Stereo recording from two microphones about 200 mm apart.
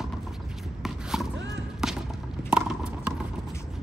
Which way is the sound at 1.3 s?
65° right (ahead or behind).